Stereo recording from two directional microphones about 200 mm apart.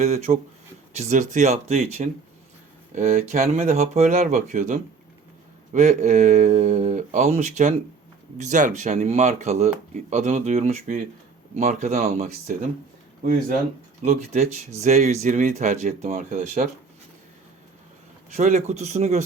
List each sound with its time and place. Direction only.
0.0 s speech: 35° right (ahead or behind)
14.0 s speech: 35° right (ahead or behind)
18.3 s speech: 35° right (ahead or behind)